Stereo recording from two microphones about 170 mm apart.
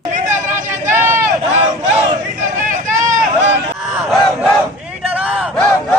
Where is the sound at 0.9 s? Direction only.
15° right (ahead or behind).